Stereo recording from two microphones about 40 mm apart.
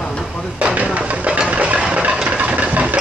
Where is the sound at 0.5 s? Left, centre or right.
Right.